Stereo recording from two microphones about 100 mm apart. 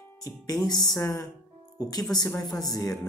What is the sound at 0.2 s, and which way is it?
Speech, 35° left (ahead or behind).